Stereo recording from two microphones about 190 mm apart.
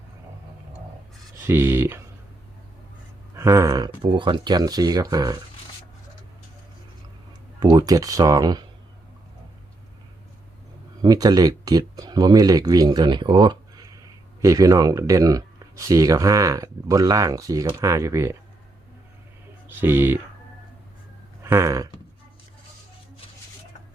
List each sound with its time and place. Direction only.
1.5 s speech: 10° right (ahead or behind)
3.3 s speech: 15° right (ahead or behind)
7.6 s speech: 20° right (ahead or behind)
11.0 s speech: 20° right (ahead or behind)
19.6 s speech: 10° right (ahead or behind)
21.4 s a sound: 15° right (ahead or behind)